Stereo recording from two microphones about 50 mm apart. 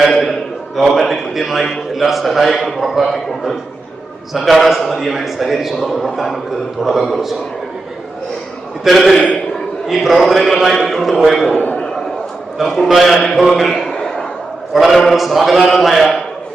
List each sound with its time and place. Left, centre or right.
0.1 s a sound: centre
0.9 s a man's voice: centre
8.8 s a man's voice: centre
9.1 s a man's voice: left
9.8 s a man's voice: centre
11.5 s a man's voice: left
12.5 s a man's voice: centre